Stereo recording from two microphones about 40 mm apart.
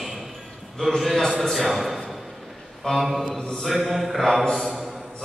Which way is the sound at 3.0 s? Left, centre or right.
Centre.